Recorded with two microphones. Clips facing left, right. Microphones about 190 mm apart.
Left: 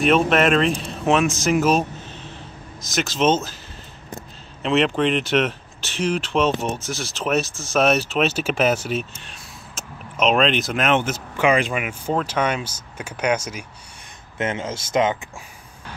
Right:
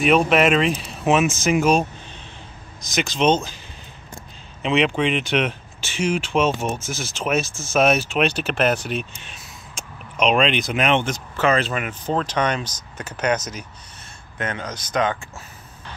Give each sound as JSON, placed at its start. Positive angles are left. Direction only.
{"t": 0.0, "sound": "speech", "side_deg": 0}
{"t": 4.6, "sound": "speech", "side_deg": 0}
{"t": 14.4, "sound": "speech", "side_deg": 25}